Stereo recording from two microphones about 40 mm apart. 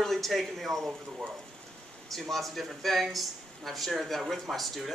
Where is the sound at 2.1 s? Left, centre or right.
Centre.